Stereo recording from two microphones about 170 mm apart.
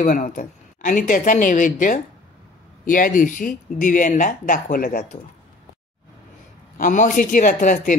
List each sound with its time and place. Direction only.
0.0 s speech: 55° left (ahead or behind)
6.8 s speech: 50° left (ahead or behind)